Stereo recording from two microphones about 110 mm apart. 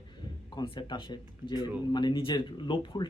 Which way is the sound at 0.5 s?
45° left (ahead or behind).